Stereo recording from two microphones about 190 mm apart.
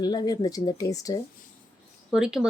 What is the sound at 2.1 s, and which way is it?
Speech, 5° right (ahead or behind).